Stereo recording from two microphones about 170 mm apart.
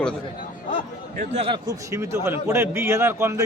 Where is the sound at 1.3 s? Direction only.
35° right (ahead or behind).